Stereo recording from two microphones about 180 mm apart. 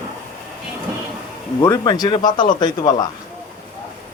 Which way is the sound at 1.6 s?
20° left (ahead or behind).